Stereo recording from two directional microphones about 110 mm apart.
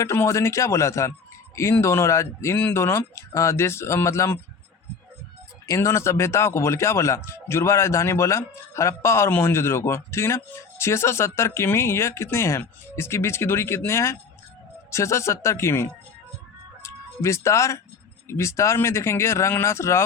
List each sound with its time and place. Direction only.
0.0 s speech: 25° left (ahead or behind)
5.6 s speech: 25° left (ahead or behind)
16.8 s music: 25° left (ahead or behind)
18.3 s speech: 25° left (ahead or behind)